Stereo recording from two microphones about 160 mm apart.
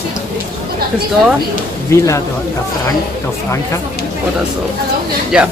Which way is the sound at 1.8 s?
15° left (ahead or behind).